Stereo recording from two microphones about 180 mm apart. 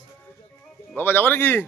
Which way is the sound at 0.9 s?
10° left (ahead or behind).